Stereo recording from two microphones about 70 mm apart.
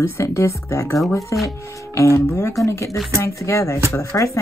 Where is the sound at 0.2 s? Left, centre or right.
Left.